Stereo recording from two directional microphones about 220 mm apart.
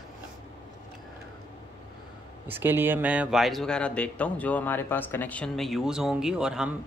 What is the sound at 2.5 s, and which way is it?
A man's voice, 10° right (ahead or behind).